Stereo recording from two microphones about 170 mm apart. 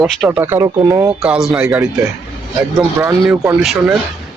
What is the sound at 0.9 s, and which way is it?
Speech, 5° right (ahead or behind).